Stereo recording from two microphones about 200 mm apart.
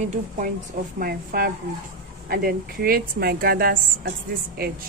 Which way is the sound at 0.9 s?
45° right (ahead or behind).